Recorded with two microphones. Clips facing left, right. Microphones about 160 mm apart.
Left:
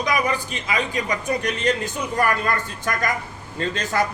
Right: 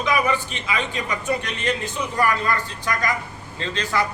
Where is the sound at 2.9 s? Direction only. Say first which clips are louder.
Even; 50° left (ahead or behind).